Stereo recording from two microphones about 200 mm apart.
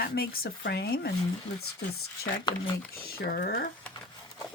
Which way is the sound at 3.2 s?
50° left (ahead or behind).